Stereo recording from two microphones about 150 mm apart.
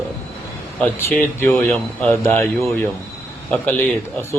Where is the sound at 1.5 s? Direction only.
5° left (ahead or behind).